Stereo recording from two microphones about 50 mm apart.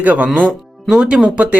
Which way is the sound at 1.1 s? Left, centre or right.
Right.